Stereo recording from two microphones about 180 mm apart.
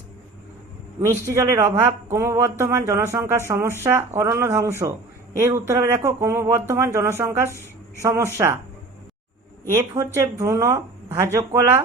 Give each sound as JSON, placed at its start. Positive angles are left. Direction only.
{"t": 1.0, "sound": "speech", "side_deg": -15}
{"t": 9.6, "sound": "speech", "side_deg": -15}